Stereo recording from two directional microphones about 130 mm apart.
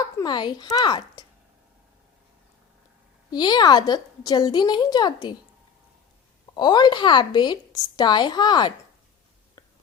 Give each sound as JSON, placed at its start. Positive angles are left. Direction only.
{"t": 0.2, "sound": "a woman's voice", "side_deg": 35}
{"t": 3.3, "sound": "a woman's voice", "side_deg": 35}
{"t": 6.5, "sound": "a woman's voice", "side_deg": 35}